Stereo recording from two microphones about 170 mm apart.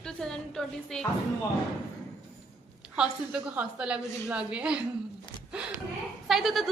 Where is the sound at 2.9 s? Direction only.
5° right (ahead or behind).